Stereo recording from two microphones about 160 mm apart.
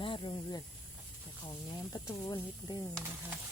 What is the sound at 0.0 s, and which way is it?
Snake, 30° left (ahead or behind).